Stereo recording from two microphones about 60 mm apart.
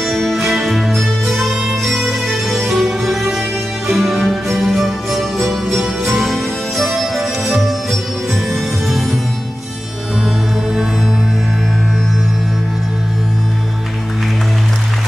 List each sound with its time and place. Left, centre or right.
0.0 s music: centre